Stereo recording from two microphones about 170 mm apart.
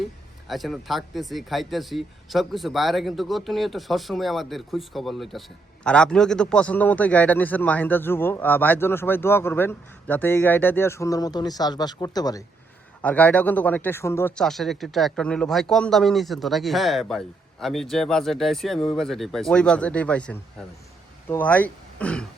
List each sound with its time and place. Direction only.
0.4 s speech: centre (ahead or behind); by 12.5 s 20° left (ahead or behind)
13.0 s speech: 10° left (ahead or behind)
14.3 s speech: centre (ahead or behind)